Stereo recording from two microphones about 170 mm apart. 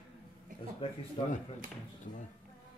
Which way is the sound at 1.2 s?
30° left (ahead or behind).